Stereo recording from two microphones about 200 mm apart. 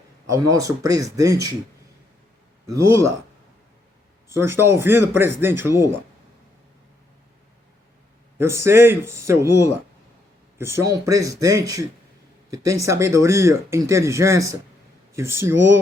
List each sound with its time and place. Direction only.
0.3 s speech: 15° right (ahead or behind)
2.7 s speech: 15° right (ahead or behind)
4.4 s speech: 10° right (ahead or behind)
8.4 s speech: 15° right (ahead or behind)